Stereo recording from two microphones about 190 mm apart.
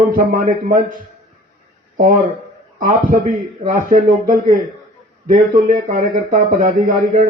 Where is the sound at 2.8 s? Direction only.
45° right (ahead or behind).